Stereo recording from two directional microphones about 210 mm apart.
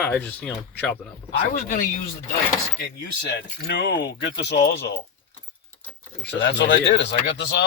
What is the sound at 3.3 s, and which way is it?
Speech, 55° left (ahead or behind).